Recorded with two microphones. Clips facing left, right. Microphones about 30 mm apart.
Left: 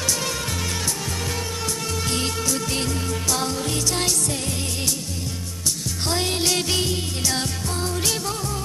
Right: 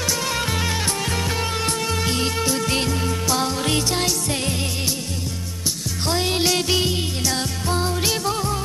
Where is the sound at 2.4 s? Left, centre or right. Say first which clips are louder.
Right 3 dB; right.